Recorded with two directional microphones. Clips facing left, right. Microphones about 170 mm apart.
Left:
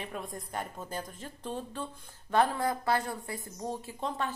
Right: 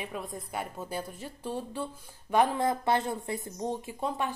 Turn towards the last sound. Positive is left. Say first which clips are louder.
# right 2 dB
turn(degrees=-15)  # may be behind; listen again after turning